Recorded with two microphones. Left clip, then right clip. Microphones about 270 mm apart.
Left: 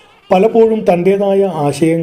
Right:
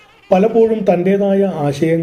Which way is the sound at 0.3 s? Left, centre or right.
Left.